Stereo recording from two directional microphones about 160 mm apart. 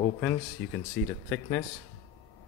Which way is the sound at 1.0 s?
90° left.